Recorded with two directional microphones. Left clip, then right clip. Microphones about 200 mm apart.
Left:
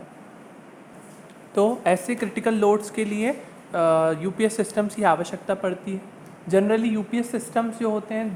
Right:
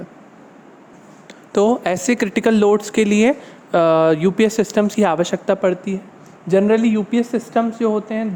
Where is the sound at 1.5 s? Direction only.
45° right (ahead or behind).